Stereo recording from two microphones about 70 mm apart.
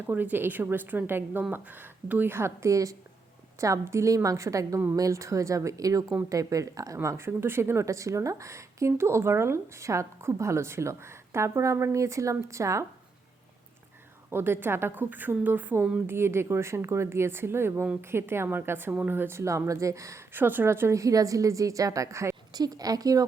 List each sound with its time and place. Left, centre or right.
0.1 s a woman's voice: right
14.3 s a woman's voice: right
16.0 s a woman's voice: right
20.3 s speech: right
22.5 s a woman's voice: right